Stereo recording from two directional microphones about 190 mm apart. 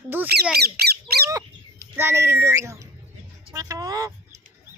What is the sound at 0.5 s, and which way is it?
Squawk, 55° right (ahead or behind).